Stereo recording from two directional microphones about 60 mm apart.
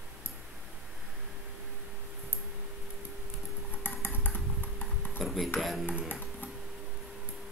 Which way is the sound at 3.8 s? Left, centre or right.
Left.